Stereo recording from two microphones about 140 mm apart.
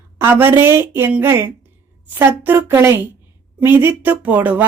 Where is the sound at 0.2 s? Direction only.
15° right (ahead or behind).